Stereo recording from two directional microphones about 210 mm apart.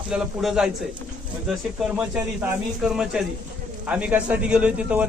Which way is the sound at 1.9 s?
5° right (ahead or behind).